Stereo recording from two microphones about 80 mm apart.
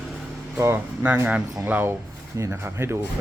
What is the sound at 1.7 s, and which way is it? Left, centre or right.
Speech, right.